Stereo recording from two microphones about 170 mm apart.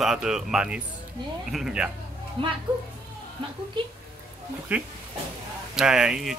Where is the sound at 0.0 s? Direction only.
5° right (ahead or behind).